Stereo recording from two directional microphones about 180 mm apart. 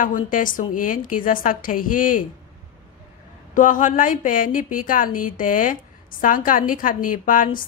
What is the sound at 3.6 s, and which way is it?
Speech, 45° left (ahead or behind).